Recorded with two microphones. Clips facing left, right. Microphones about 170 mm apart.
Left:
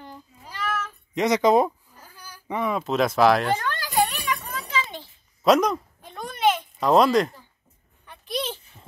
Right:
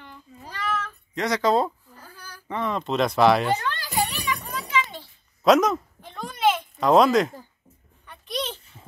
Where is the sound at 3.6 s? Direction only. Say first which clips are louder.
Left 3 dB; 45° left (ahead or behind).